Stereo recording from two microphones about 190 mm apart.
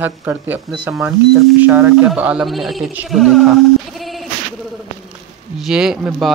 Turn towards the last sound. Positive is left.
turn(degrees=-5)  # may be behind; listen again after turning